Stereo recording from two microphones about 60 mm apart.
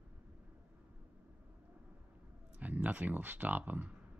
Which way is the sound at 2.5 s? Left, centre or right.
Right.